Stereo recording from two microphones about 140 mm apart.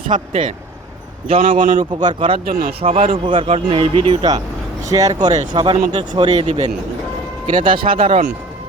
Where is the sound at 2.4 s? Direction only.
90° right.